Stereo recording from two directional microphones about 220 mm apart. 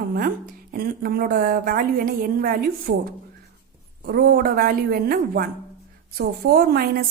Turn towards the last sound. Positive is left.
turn(degrees=-45)  # may be behind; listen again after turning